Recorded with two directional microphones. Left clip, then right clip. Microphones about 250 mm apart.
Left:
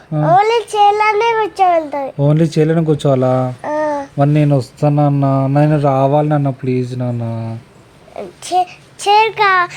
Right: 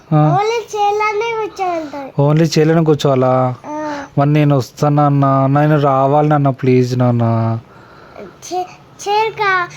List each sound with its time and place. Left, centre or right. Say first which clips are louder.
0.3 s a child's voice: left 4 dB; left
2.1 s speech: right 3 dB; right
3.6 s a sound: left 6 dB; left
4.2 s speech: right 2 dB; right
8.1 s a child's voice: left 6 dB; left